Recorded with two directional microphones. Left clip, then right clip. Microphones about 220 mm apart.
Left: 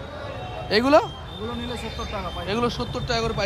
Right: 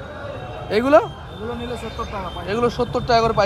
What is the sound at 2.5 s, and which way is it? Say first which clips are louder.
Speech: right 6 dB; 15° left (ahead or behind).